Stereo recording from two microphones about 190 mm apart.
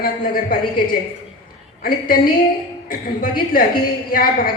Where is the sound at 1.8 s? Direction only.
50° left (ahead or behind).